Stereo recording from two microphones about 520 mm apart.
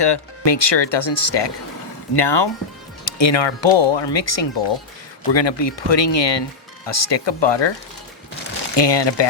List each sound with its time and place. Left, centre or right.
0.0 s speech: left
8.7 s speech: left